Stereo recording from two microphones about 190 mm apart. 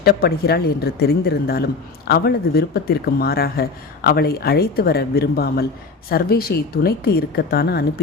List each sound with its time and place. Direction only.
0.0 s speech: 55° left (ahead or behind)